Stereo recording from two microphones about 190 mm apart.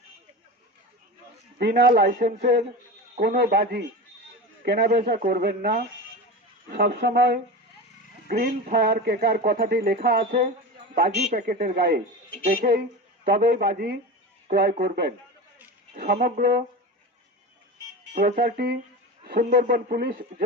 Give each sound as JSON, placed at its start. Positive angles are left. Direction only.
{"t": 1.5, "sound": "a man's voice", "side_deg": -60}
{"t": 18.2, "sound": "speech", "side_deg": -50}